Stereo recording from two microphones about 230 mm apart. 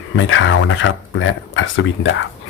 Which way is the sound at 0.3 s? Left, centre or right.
Left.